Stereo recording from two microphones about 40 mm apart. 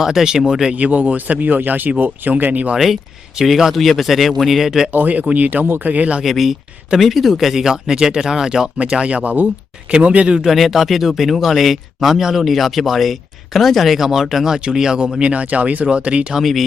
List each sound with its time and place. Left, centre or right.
0.0 s speech: centre
0.7 s a man's voice: right
2.7 s speech: centre
4.9 s a man's voice: right
5.9 s speech: right
6.2 s speech: centre; by 10.3 s right
10.5 s speech: centre; by 15.3 s right
15.3 s speech: right
16.4 s speech: centre